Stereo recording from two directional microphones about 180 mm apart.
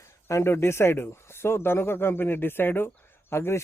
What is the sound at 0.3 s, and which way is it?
Speech, 15° left (ahead or behind).